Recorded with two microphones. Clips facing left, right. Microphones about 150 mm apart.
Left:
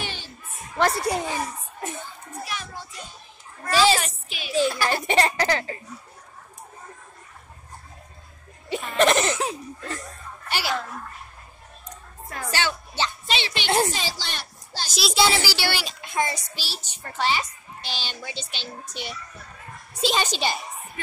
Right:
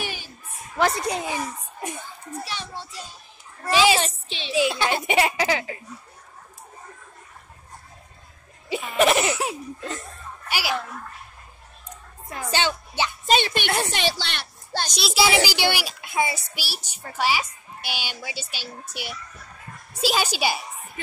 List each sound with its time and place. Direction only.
0.0 s a sound: 10° right (ahead or behind)
0.7 s a woman's voice: centre (ahead or behind)
1.2 s a child's voice: 15° right (ahead or behind)
2.4 s a woman's voice: 30° right (ahead or behind)
3.7 s speech: 10° right (ahead or behind)
4.0 s a woman's voice: 30° right (ahead or behind); by 5.8 s 5° right (ahead or behind)
8.6 s a woman's voice: 5° right (ahead or behind)
12.3 s a woman's voice: 20° right (ahead or behind)
13.3 s a woman's voice: 50° right (ahead or behind)
13.9 s a woman's voice: 65° right (ahead or behind)
14.9 s a woman's voice: centre (ahead or behind)
15.3 s speech: 15° right (ahead or behind)